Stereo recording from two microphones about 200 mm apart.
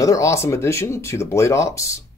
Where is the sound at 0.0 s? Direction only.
15° left (ahead or behind).